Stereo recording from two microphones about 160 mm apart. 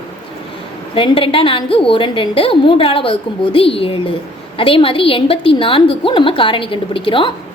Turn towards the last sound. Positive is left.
turn(degrees=35)  # may be behind; listen again after turning